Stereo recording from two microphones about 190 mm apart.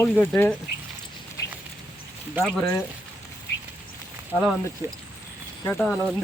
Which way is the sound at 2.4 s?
10° right (ahead or behind).